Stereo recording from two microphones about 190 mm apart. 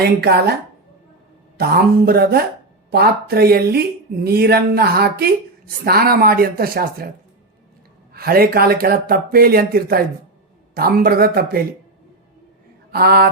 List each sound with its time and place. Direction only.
0.0 s speech: 55° right (ahead or behind)
1.5 s speech: 55° right (ahead or behind)
8.1 s speech: 55° right (ahead or behind)
12.9 s speech: 55° right (ahead or behind)